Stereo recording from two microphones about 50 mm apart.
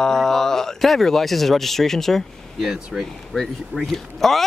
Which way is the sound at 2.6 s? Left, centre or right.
Centre.